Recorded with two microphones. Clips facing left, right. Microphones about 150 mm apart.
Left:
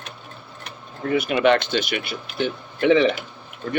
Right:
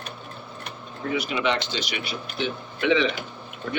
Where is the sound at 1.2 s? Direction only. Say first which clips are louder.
Left 8 dB; 55° left (ahead or behind).